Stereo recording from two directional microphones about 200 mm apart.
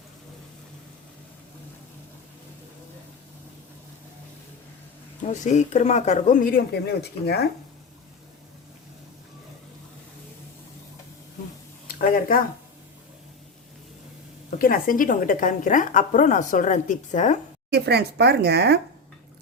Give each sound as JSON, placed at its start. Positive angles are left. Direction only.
{"t": 5.3, "sound": "a woman's voice", "side_deg": 35}
{"t": 11.9, "sound": "a sound", "side_deg": 45}
{"t": 14.6, "sound": "a woman's voice", "side_deg": 45}
{"t": 17.7, "sound": "speech", "side_deg": -55}